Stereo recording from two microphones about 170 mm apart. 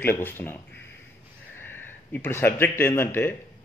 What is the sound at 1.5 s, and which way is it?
A man's voice, 10° left (ahead or behind).